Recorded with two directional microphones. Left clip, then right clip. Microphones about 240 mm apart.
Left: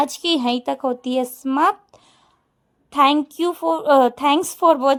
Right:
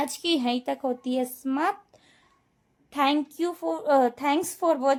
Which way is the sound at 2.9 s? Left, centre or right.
Left.